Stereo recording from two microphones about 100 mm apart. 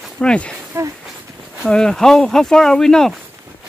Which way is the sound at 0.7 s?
25° right (ahead or behind).